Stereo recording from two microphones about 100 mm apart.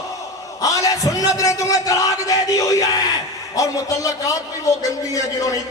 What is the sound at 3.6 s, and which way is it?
Speech, 35° left (ahead or behind).